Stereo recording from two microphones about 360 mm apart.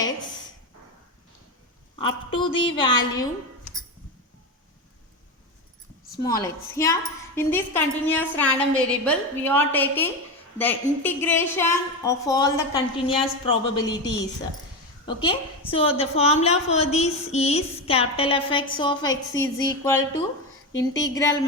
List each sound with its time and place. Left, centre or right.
2.0 s a woman's voice: centre
6.2 s a woman's voice: centre
14.0 s a woman's voice: left
15.3 s a woman's voice: centre